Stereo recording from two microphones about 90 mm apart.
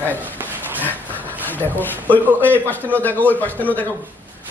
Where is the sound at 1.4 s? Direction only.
20° left (ahead or behind).